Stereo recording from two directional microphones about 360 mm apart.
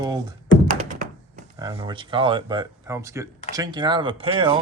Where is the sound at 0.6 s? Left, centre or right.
Right.